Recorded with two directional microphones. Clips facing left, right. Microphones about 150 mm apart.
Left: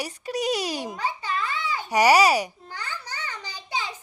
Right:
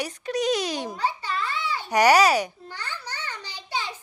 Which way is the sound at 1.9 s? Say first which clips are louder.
Even; 5° left (ahead or behind).